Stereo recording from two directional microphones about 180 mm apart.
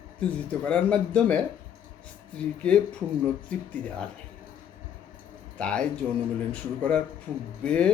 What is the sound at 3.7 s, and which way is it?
Speech, 5° left (ahead or behind).